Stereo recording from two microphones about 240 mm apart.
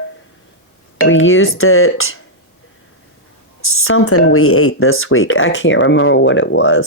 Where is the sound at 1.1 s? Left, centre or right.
Left.